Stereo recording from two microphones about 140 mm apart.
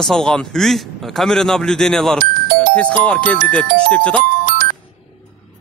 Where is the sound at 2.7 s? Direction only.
10° left (ahead or behind).